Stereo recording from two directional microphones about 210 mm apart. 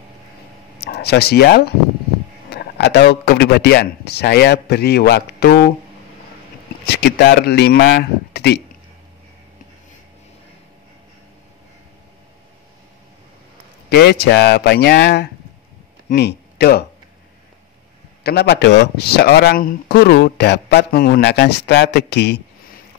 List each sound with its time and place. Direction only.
0.7 s speech: 50° left (ahead or behind)
6.9 s speech: 55° left (ahead or behind)
13.8 s a man's voice: 50° left (ahead or behind)
18.2 s speech: 50° left (ahead or behind)